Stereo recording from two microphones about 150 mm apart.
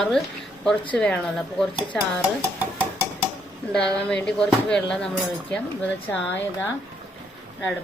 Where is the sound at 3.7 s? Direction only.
5° left (ahead or behind).